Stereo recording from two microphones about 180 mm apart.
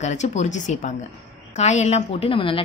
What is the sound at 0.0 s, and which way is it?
A woman's voice, 40° left (ahead or behind).